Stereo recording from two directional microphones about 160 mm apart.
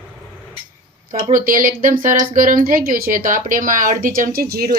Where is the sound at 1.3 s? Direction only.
60° right (ahead or behind).